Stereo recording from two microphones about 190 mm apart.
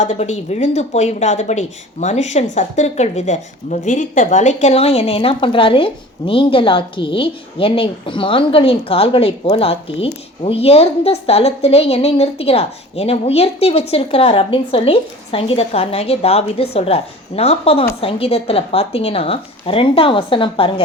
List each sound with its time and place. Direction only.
0.0 s a woman's voice: 35° left (ahead or behind)